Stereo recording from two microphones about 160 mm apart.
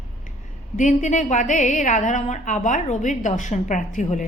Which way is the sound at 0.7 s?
50° left (ahead or behind).